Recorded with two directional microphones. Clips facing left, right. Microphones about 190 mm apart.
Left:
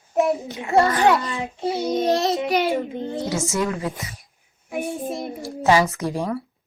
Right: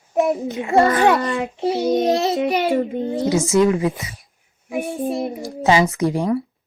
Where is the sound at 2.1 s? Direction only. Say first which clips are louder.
Right 2 dB; centre (ahead or behind).